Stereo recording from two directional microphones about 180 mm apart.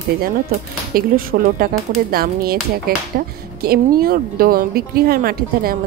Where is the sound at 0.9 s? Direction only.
55° right (ahead or behind).